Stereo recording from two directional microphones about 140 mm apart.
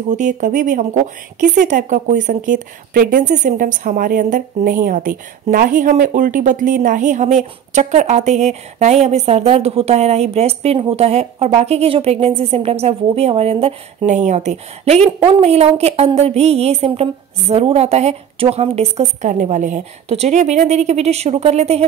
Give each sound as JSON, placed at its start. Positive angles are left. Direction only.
{"t": 0.1, "sound": "a woman's voice", "side_deg": -65}
{"t": 19.3, "sound": "a woman's voice", "side_deg": -60}